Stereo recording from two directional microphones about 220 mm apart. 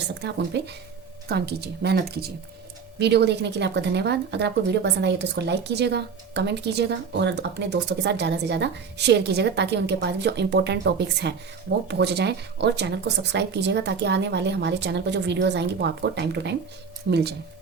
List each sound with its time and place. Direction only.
0.1 s speech: 50° right (ahead or behind)